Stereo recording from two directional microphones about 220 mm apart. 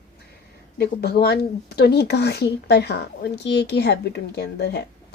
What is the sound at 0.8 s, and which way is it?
Speech, 45° left (ahead or behind).